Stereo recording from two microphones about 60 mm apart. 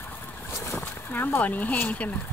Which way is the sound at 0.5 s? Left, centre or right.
Left.